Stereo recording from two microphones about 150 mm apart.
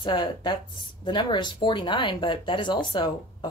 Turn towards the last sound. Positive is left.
turn(degrees=30)  # may be behind; listen again after turning